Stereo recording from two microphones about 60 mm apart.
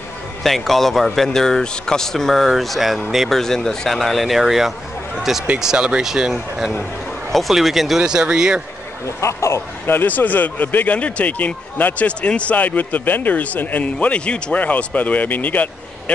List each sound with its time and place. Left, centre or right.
0.4 s speech: centre
8.0 s speech: centre
9.0 s speech: left
9.8 s speech: left